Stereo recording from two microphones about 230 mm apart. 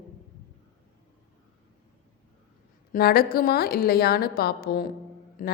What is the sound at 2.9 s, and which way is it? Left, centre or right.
A woman's voice, left.